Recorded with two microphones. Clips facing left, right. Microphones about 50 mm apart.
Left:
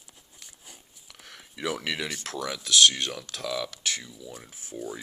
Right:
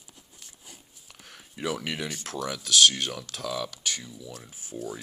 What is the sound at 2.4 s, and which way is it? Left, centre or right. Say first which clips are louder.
Speech: even; left.